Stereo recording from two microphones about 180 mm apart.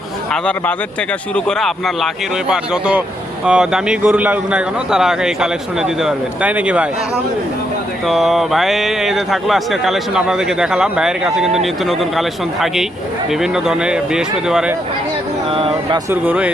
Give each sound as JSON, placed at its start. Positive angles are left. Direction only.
{"t": 1.5, "sound": "speech", "side_deg": 0}
{"t": 8.0, "sound": "speech", "side_deg": 0}
{"t": 15.5, "sound": "speech", "side_deg": -30}
{"t": 16.0, "sound": "speech", "side_deg": -10}